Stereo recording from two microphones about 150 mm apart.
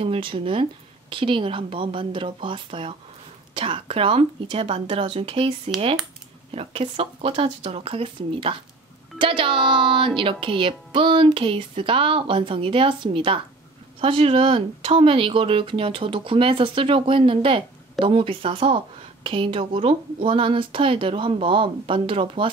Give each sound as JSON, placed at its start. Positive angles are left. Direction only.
{"t": 0.0, "sound": "speech", "side_deg": -40}
{"t": 6.5, "sound": "speech", "side_deg": -40}